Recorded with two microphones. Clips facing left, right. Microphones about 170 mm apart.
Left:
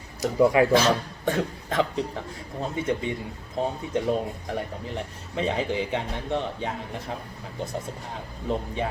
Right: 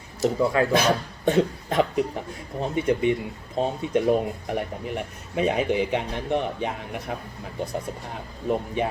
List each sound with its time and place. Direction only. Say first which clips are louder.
0.2 s a man's voice: left 2 dB; 15° left (ahead or behind)
0.7 s a man's voice: left 1 dB; 15° right (ahead or behind)
8.4 s speech: right 3 dB; 15° right (ahead or behind)